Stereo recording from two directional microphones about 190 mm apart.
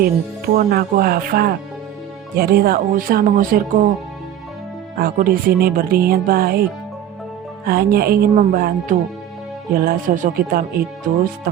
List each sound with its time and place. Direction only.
0.5 s speech: 50° right (ahead or behind)
4.9 s speech: 50° right (ahead or behind)
7.6 s speech: 50° right (ahead or behind)